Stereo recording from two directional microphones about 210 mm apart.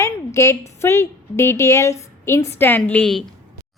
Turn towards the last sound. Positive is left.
turn(degrees=5)  # may be behind; listen again after turning